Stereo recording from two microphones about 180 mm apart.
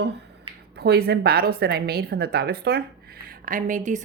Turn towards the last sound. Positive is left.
turn(degrees=-45)  # may be behind; listen again after turning